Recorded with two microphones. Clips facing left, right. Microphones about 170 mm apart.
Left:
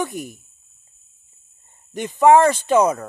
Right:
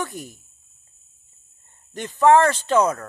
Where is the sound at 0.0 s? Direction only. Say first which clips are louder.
Left 4 dB; 15° left (ahead or behind).